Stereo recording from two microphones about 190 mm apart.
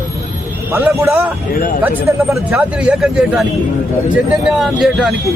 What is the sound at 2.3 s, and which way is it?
A man's voice, 5° right (ahead or behind).